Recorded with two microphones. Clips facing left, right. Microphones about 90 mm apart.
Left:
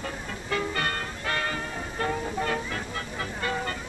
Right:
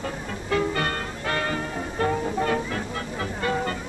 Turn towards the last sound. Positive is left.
turn(degrees=-30)  # may be behind; listen again after turning